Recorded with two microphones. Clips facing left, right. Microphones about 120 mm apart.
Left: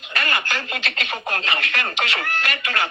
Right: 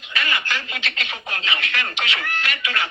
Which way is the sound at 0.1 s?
45° left (ahead or behind).